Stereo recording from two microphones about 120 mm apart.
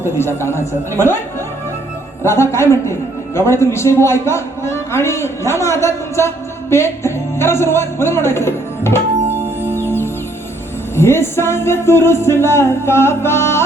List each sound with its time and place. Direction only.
0.0 s a man's voice: 20° left (ahead or behind)
2.2 s a man's voice: 20° left (ahead or behind)
9.3 s music: 15° right (ahead or behind)
10.9 s a man's voice: 20° left (ahead or behind)